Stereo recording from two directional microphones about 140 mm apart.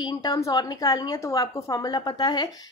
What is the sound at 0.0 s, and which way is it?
A woman's voice, 30° left (ahead or behind).